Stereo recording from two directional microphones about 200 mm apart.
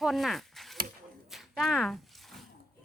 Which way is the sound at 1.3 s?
Centre (ahead or behind).